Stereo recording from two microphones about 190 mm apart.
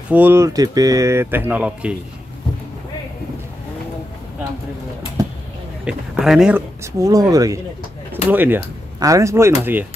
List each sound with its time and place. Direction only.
0.1 s speech: 10° right (ahead or behind)
5.9 s speech: 5° right (ahead or behind)
6.8 s speech: 20° right (ahead or behind)